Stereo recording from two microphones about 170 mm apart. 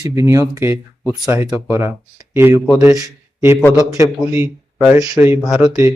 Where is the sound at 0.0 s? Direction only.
20° right (ahead or behind).